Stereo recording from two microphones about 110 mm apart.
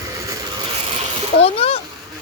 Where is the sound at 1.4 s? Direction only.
65° left (ahead or behind).